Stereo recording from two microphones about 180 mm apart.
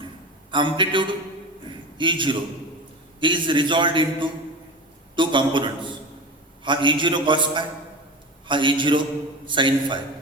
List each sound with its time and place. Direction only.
0.5 s a man's voice: 25° right (ahead or behind)